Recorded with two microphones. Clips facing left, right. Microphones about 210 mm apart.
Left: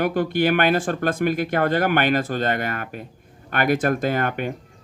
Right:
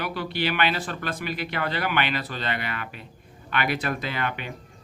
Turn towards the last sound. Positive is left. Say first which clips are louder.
# left 8 dB
turn(degrees=45)  # may be behind; listen again after turning